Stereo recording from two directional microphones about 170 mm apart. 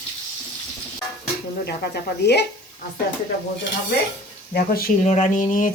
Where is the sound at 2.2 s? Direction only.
80° left.